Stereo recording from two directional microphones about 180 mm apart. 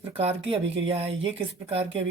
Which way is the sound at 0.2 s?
35° right (ahead or behind).